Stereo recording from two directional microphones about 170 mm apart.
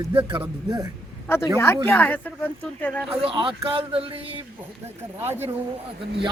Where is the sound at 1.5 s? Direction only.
15° left (ahead or behind).